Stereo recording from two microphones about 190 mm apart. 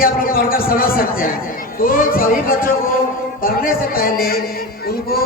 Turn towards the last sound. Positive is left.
turn(degrees=50)  # may be behind; listen again after turning